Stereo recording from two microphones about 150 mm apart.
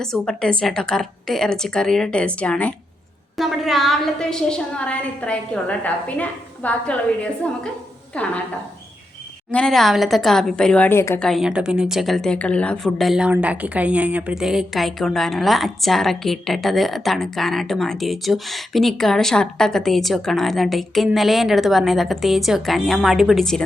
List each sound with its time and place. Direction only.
0.0 s a woman's voice: 5° left (ahead or behind)
9.5 s a woman's voice: 5° left (ahead or behind)
11.2 s a woman's voice: centre (ahead or behind)